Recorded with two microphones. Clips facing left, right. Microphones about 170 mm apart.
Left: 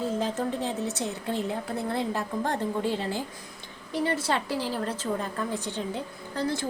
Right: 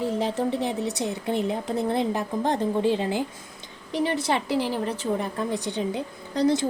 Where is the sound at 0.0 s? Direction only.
15° right (ahead or behind).